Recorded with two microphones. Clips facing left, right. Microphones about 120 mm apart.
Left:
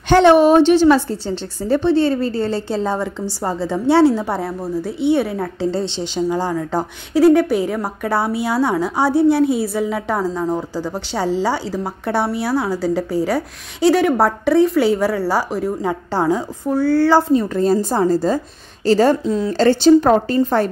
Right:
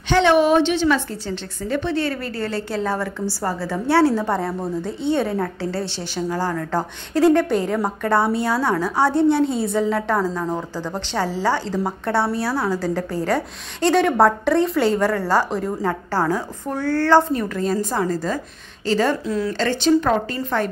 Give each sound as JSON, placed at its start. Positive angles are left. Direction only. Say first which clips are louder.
{"t": 0.1, "sound": "a woman's voice", "louder": "left 5 dB", "side_deg": 40}
{"t": 5.6, "sound": "a woman's voice", "louder": "left 5 dB", "side_deg": 20}
{"t": 17.6, "sound": "a woman's voice", "louder": "left 5 dB", "side_deg": 35}